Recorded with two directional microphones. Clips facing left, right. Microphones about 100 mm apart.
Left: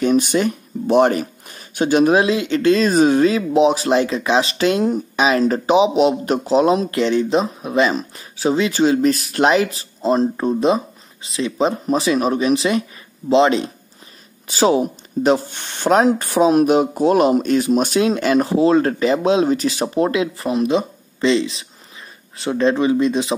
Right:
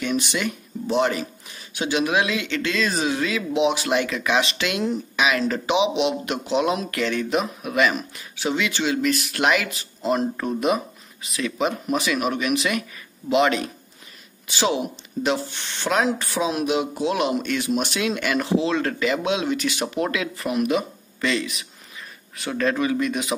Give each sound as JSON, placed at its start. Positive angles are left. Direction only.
{"t": 0.0, "sound": "speech", "side_deg": 40}
{"t": 0.8, "sound": "a man's voice", "side_deg": 50}
{"t": 14.5, "sound": "a man's voice", "side_deg": 40}